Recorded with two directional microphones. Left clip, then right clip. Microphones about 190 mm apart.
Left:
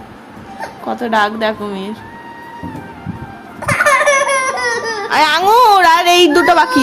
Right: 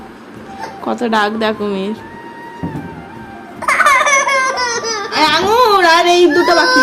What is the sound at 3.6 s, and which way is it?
Baby laughter, 15° right (ahead or behind).